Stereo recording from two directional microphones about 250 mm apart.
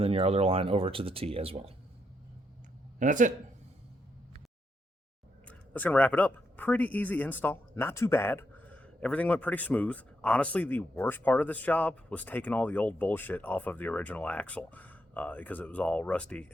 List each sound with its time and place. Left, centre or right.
0.0 s speech: right
3.0 s speech: right
5.5 s speech: centre